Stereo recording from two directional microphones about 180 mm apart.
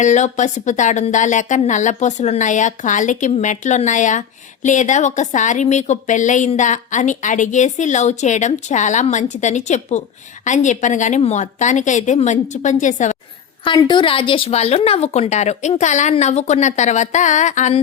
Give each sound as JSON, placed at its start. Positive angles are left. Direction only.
{"t": 0.0, "sound": "speech", "side_deg": 40}
{"t": 13.7, "sound": "a woman's voice", "side_deg": 25}